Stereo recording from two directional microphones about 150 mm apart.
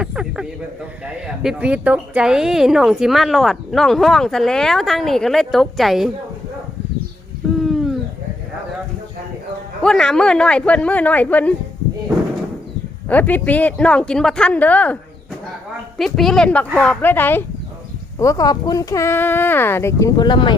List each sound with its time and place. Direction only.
0.0 s a sound: 5° right (ahead or behind)
1.0 s speech: 5° right (ahead or behind)
7.6 s a sound: centre (ahead or behind)
9.8 s speech: 5° left (ahead or behind)
13.1 s speech: 10° left (ahead or behind)
16.0 s speech: centre (ahead or behind); by 20.6 s 30° left (ahead or behind)